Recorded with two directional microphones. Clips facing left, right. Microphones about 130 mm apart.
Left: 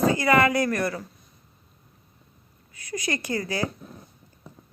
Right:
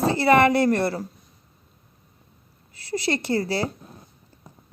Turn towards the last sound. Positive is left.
turn(degrees=-30)  # may be behind; listen again after turning